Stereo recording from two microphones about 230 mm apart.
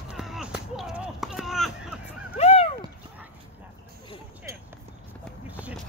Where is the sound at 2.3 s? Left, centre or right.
Left.